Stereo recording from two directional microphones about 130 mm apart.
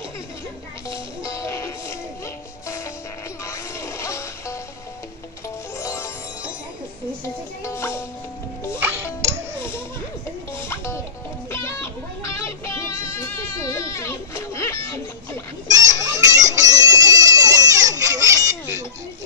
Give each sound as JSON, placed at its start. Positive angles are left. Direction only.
{"t": 0.8, "sound": "music", "side_deg": 25}
{"t": 3.4, "sound": "music", "side_deg": 20}
{"t": 5.8, "sound": "music", "side_deg": 25}
{"t": 7.6, "sound": "music", "side_deg": 20}
{"t": 8.7, "sound": "music", "side_deg": -15}
{"t": 10.6, "sound": "music", "side_deg": 20}
{"t": 15.7, "sound": "music", "side_deg": -25}